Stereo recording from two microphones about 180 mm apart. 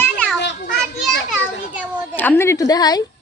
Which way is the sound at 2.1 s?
10° left (ahead or behind).